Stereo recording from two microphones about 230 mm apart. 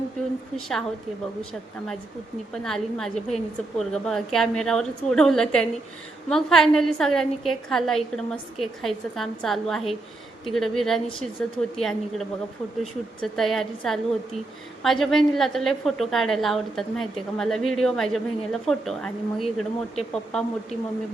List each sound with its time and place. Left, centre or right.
0.5 s a woman's voice: centre
2.5 s a woman's voice: centre